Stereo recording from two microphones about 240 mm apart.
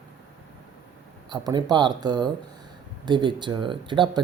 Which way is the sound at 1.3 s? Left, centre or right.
Centre.